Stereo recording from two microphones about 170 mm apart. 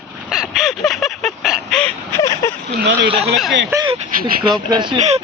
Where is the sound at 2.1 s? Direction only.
20° left (ahead or behind).